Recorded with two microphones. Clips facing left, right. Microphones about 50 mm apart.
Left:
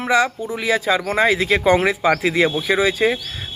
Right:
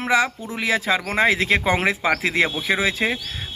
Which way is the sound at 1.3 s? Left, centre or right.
Right.